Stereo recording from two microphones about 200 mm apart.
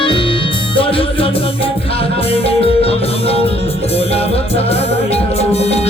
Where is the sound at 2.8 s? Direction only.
30° left (ahead or behind).